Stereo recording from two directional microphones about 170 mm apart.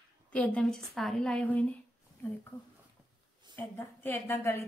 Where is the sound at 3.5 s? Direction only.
15° left (ahead or behind).